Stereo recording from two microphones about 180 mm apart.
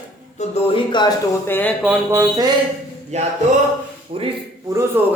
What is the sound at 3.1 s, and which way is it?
Speech, 40° right (ahead or behind).